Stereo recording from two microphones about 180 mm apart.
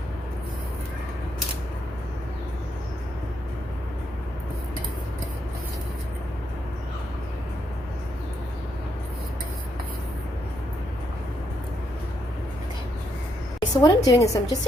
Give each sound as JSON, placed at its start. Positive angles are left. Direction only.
{"t": 13.6, "sound": "a woman's voice", "side_deg": 20}